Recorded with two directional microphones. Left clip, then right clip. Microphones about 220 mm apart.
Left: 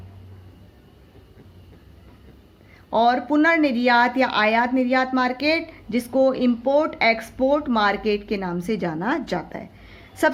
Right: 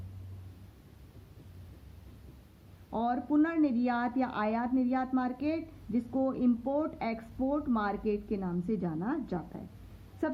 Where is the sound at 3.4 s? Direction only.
15° left (ahead or behind).